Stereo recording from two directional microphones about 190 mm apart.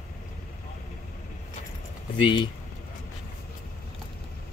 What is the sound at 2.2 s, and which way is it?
Speech, 25° left (ahead or behind).